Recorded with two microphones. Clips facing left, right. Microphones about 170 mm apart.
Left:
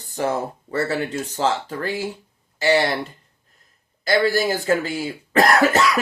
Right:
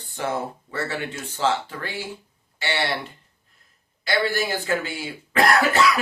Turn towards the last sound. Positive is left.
turn(degrees=40)  # may be behind; listen again after turning